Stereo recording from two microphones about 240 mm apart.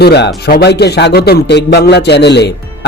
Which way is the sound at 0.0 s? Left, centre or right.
Left.